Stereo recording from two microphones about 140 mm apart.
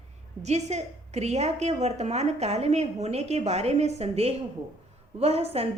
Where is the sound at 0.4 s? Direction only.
55° right (ahead or behind).